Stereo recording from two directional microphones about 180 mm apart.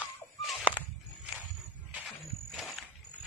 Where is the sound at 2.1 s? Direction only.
Centre (ahead or behind).